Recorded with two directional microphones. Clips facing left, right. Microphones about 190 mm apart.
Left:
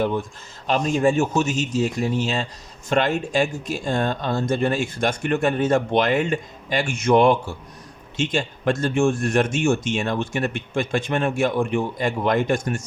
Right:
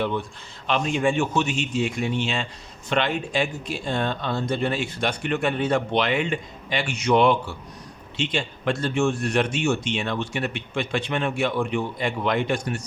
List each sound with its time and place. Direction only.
0.0 s a man's voice: 45° left (ahead or behind)